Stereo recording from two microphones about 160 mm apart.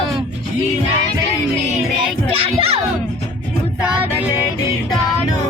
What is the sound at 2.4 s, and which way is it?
Music, 40° right (ahead or behind).